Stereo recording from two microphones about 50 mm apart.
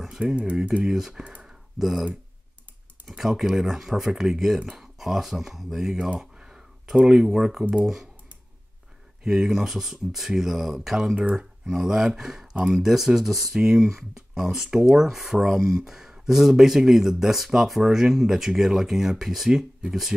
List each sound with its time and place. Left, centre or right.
0.2 s speech: right
0.8 s speech: centre
1.4 s a sound: centre
3.1 s speech: centre
6.1 s clicking: centre
7.2 s speech: centre
9.2 s speech: centre